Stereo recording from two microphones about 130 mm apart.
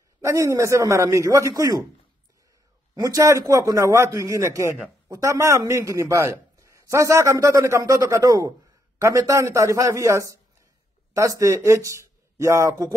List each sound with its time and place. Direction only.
0.2 s a man's voice: 25° right (ahead or behind)
2.9 s a man's voice: 25° right (ahead or behind)